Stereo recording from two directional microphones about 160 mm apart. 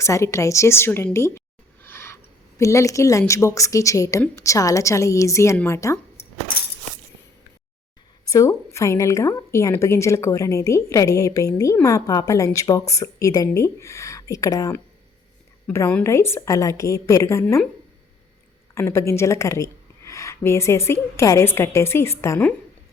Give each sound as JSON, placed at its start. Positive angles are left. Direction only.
{"t": 0.0, "sound": "a woman's voice", "side_deg": 20}
{"t": 1.8, "sound": "a sound", "side_deg": 15}
{"t": 2.6, "sound": "a woman's voice", "side_deg": 20}
{"t": 6.2, "sound": "a sound", "side_deg": 85}
{"t": 8.3, "sound": "a woman's voice", "side_deg": 20}
{"t": 18.7, "sound": "a woman's voice", "side_deg": 15}